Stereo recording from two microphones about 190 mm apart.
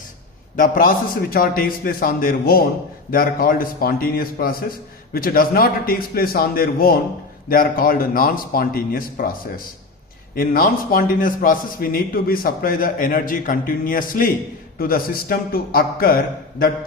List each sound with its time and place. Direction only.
0.5 s a man's voice: 45° left (ahead or behind)
10.3 s a man's voice: 50° left (ahead or behind)